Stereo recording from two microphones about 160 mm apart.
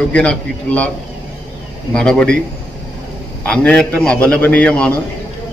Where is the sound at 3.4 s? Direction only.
5° left (ahead or behind).